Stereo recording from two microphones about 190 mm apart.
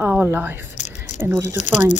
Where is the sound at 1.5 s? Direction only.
40° left (ahead or behind).